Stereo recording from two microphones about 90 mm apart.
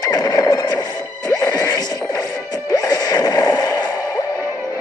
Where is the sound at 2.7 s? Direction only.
50° left (ahead or behind).